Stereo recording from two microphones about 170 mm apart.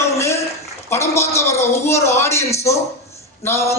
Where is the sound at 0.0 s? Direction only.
15° left (ahead or behind).